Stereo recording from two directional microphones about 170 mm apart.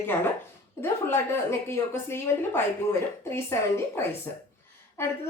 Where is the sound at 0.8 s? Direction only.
15° left (ahead or behind).